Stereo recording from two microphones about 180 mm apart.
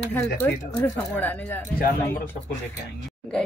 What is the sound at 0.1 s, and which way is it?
Speech, 10° left (ahead or behind).